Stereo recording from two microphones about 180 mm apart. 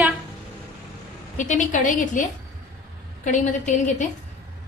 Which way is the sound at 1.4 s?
45° left (ahead or behind).